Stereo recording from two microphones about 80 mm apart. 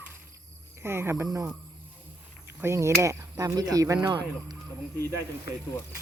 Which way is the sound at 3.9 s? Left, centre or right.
Right.